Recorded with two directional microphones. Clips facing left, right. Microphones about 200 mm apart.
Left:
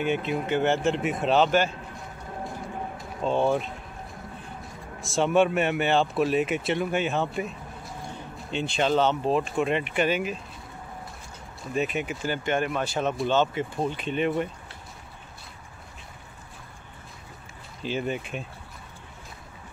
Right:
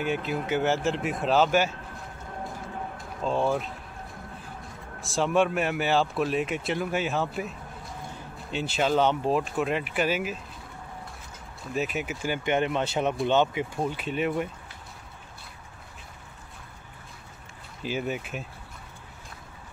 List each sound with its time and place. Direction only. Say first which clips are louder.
0.0 s speech: left 2 dB; centre (ahead or behind)
3.0 s speech: left 2 dB; centre (ahead or behind)
5.0 s speech: left 2 dB; centre (ahead or behind)
11.7 s speech: left 2 dB; centre (ahead or behind)
17.8 s speech: left 1 dB; 5° right (ahead or behind)